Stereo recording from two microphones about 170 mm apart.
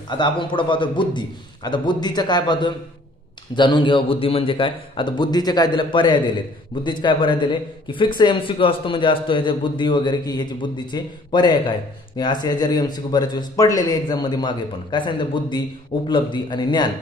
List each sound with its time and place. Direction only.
0.1 s a man's voice: 30° left (ahead or behind)